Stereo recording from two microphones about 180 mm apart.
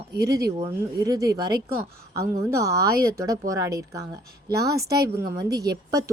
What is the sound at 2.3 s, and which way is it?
Speech, 15° right (ahead or behind).